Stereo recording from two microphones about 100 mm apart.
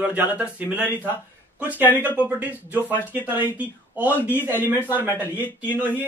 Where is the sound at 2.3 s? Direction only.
15° right (ahead or behind).